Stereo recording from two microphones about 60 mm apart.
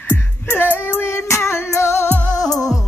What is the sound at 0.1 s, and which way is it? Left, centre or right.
Music, left.